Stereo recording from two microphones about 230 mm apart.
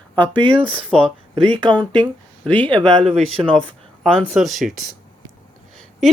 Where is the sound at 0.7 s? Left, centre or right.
Centre.